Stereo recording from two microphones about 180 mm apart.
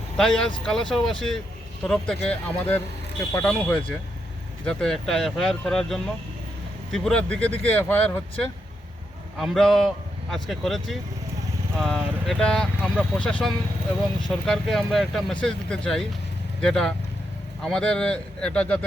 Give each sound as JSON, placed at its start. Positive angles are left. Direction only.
{"t": 0.2, "sound": "speech", "side_deg": 5}
{"t": 9.4, "sound": "speech", "side_deg": 0}